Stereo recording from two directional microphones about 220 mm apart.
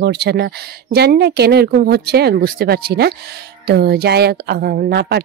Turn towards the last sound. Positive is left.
turn(degrees=-45)  # may be behind; listen again after turning